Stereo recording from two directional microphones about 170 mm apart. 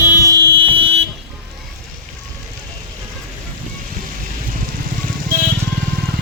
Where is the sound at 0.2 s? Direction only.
20° right (ahead or behind).